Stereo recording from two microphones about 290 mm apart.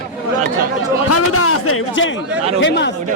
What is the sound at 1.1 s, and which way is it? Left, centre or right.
A man's voice, left.